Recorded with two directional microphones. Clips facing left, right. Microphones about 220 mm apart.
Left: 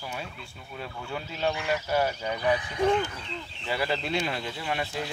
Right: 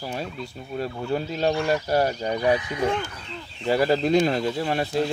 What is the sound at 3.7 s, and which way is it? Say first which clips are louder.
Speech: right 9 dB; 40° right (ahead or behind).